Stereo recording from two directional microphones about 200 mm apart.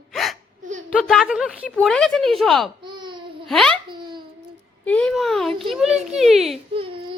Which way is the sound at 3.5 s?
Centre (ahead or behind).